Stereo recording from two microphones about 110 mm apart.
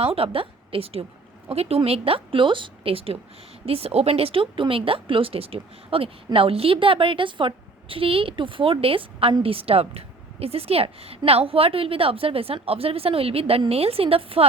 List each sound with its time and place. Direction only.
0.0 s speech: 60° right (ahead or behind)